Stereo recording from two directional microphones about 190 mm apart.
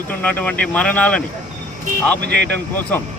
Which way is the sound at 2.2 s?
60° right (ahead or behind).